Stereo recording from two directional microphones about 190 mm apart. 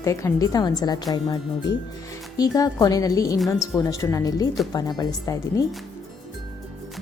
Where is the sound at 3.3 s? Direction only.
Centre (ahead or behind).